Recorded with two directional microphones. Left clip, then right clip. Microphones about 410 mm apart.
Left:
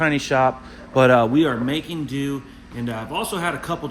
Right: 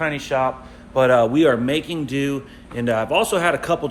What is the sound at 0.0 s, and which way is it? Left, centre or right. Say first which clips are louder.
A man's voice: left 2 dB; left.